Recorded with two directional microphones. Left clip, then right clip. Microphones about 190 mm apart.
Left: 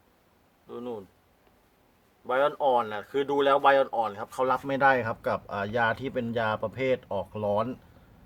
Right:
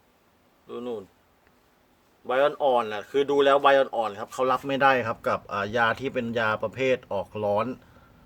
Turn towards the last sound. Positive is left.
turn(degrees=-5)  # may be behind; listen again after turning